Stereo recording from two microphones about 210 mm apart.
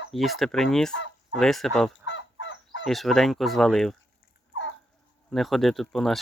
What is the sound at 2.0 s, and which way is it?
Fowl, 65° left (ahead or behind).